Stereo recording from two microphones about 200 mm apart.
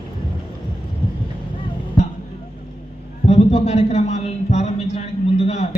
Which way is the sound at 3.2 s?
30° left (ahead or behind).